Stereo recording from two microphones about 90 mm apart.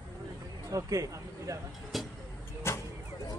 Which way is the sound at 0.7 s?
40° right (ahead or behind).